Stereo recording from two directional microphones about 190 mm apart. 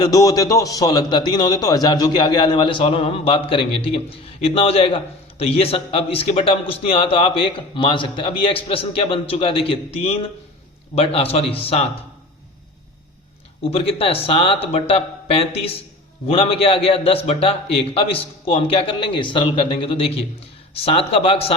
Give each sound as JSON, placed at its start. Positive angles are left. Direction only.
{"t": 0.0, "sound": "a man's voice", "side_deg": 20}
{"t": 13.6, "sound": "a man's voice", "side_deg": 30}